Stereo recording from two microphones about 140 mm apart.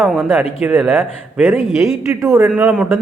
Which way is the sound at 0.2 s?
15° right (ahead or behind).